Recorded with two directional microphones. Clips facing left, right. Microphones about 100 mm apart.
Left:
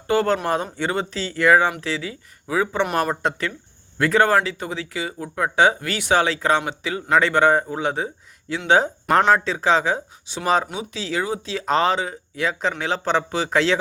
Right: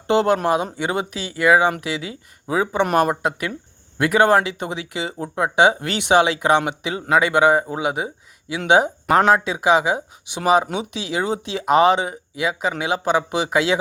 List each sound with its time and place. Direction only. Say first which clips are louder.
0.1 s speech: right 3 dB; 20° right (ahead or behind)